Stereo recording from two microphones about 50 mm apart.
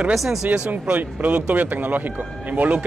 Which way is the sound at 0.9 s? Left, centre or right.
Right.